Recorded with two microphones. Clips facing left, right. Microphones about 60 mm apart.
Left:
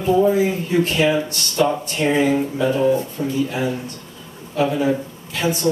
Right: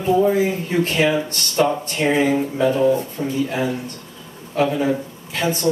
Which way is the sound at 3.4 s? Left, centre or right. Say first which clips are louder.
Even; right.